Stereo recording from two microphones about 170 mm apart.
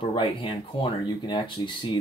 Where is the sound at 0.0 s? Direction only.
30° left (ahead or behind).